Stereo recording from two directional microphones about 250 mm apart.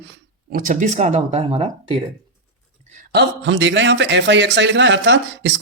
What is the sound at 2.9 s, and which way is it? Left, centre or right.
A man's voice, right.